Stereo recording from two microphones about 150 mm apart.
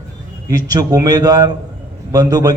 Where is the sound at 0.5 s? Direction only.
25° right (ahead or behind).